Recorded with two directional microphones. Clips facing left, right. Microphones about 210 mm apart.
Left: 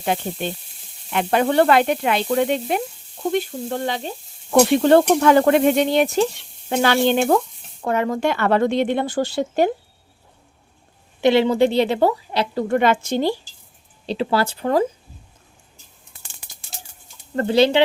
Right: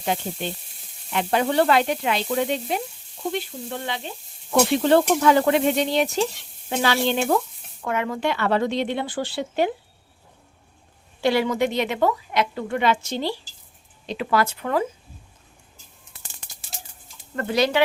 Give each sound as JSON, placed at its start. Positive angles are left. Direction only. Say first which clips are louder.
{"t": 1.1, "sound": "sizzle", "louder": "left 3 dB", "side_deg": 60}
{"t": 3.3, "sound": "speech", "louder": "left 7 dB", "side_deg": 45}
{"t": 7.8, "sound": "speech", "louder": "left 5 dB", "side_deg": 35}
{"t": 11.2, "sound": "a woman's voice", "louder": "left 5 dB", "side_deg": 25}
{"t": 14.1, "sound": "a woman's voice", "louder": "left 2 dB", "side_deg": 30}
{"t": 17.3, "sound": "speech", "louder": "left 5 dB", "side_deg": 30}